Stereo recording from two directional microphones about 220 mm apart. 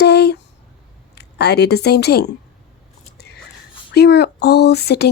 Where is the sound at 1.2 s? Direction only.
45° left (ahead or behind).